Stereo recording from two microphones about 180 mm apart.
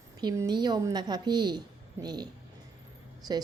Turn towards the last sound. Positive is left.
turn(degrees=-20)  # may be behind; listen again after turning